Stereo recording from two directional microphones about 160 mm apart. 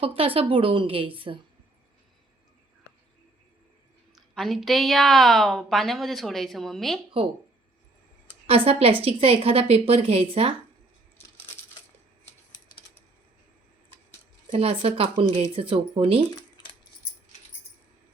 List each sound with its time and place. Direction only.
0.2 s a woman's voice: 35° right (ahead or behind)
4.1 s a woman's voice: centre (ahead or behind)
8.4 s a woman's voice: 35° right (ahead or behind)
14.5 s a woman's voice: 35° right (ahead or behind)